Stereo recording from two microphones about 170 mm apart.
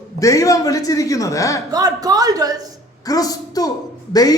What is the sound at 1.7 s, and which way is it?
Speech, 20° right (ahead or behind).